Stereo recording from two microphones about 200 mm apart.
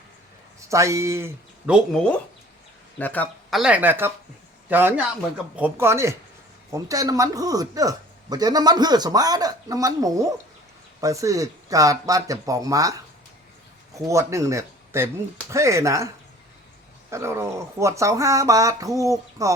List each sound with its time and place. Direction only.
0.7 s a man's voice: 15° right (ahead or behind); by 3.6 s 10° left (ahead or behind)
3.6 s a man's voice: 5° right (ahead or behind)
17.1 s a man's voice: 15° right (ahead or behind)